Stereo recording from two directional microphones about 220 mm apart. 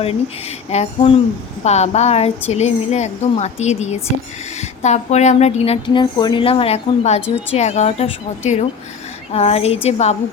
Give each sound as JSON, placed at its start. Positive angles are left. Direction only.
{"t": 0.0, "sound": "a woman's voice", "side_deg": 25}